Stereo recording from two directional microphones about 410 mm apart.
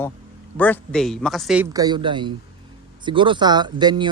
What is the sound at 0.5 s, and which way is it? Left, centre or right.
Speech, centre.